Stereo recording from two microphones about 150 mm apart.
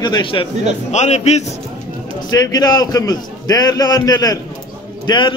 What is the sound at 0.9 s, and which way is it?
Speech, 50° left (ahead or behind).